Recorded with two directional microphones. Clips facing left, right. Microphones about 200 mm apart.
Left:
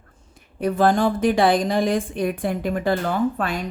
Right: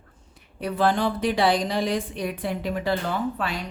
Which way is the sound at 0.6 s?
45° left (ahead or behind).